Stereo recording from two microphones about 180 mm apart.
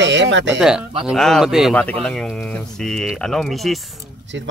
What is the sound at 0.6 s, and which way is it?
Speech, 5° right (ahead or behind).